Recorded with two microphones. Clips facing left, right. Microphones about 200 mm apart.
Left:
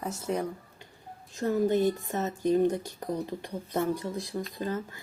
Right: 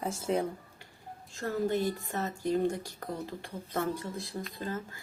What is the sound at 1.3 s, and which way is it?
Speech, 20° left (ahead or behind).